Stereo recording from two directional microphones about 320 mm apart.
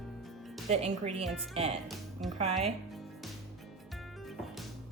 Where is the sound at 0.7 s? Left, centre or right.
Centre.